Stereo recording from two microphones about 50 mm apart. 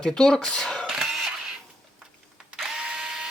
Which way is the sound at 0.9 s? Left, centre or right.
Centre.